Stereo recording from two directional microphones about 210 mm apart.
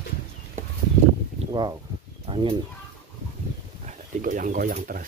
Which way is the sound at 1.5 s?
20° right (ahead or behind).